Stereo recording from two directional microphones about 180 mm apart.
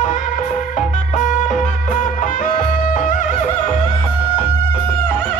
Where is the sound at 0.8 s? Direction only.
45° left (ahead or behind).